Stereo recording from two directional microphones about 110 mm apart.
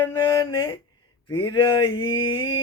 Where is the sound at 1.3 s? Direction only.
45° left (ahead or behind).